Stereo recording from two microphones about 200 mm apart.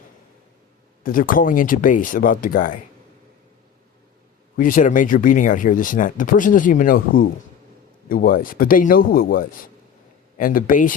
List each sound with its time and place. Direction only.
1.0 s speech: 45° left (ahead or behind)
4.5 s speech: 40° left (ahead or behind)
8.1 s speech: 45° left (ahead or behind)